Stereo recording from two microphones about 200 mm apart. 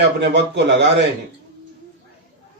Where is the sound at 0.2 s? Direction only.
60° right (ahead or behind).